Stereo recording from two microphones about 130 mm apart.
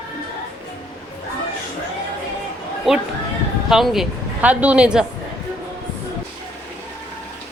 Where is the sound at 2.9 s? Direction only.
Centre (ahead or behind).